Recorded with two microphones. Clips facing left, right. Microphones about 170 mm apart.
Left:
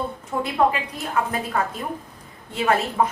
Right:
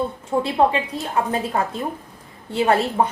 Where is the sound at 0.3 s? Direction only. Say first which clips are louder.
Right 2 dB; 30° right (ahead or behind).